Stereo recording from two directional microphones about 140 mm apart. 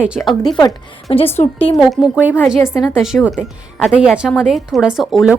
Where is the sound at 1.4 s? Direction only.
40° left (ahead or behind).